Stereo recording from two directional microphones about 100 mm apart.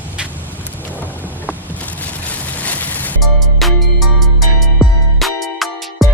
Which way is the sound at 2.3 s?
15° left (ahead or behind).